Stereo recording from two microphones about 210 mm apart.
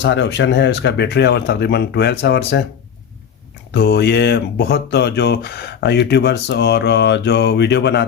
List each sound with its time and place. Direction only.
0.0 s speech: 55° left (ahead or behind)
3.7 s speech: 50° left (ahead or behind)